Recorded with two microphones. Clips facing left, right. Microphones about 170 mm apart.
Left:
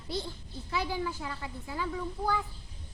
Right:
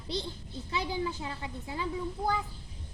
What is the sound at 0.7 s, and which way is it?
A child's voice, 20° right (ahead or behind).